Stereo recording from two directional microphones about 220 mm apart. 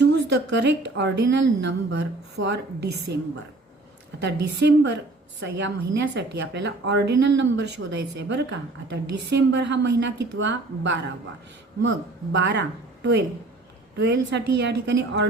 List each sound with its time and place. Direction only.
0.0 s a woman's voice: 50° right (ahead or behind)
4.2 s a woman's voice: 55° right (ahead or behind)
12.3 s a woman's voice: 55° right (ahead or behind)